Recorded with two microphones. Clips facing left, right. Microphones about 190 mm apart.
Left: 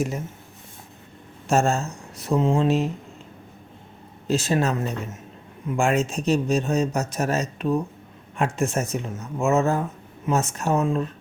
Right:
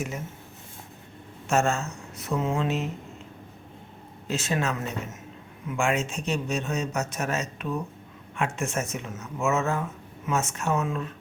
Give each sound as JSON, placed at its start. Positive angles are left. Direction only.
{"t": 1.5, "sound": "speech", "side_deg": 35}
{"t": 4.3, "sound": "speech", "side_deg": 35}